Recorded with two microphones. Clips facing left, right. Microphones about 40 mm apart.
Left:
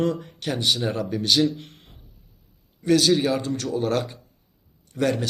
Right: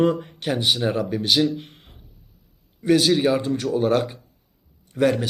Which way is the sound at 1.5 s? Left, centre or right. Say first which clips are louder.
Right 6 dB; centre.